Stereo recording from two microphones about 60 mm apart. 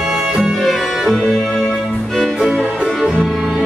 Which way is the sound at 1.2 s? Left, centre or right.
Centre.